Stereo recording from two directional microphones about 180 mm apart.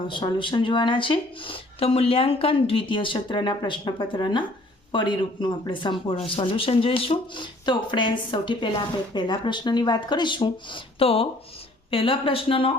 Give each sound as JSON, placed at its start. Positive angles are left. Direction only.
{"t": 0.1, "sound": "speech", "side_deg": 25}